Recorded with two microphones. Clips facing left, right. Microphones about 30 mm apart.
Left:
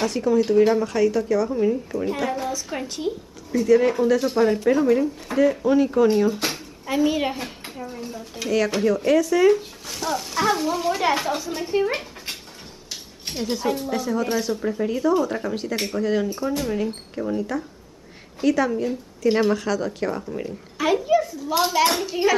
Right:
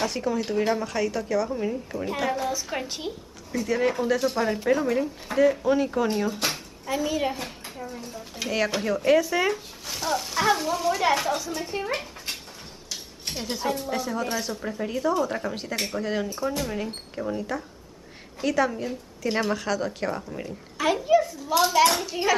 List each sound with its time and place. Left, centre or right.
0.0 s a child's voice: centre
6.9 s a woman's voice: centre
8.4 s speech: centre
9.5 s a child's voice: centre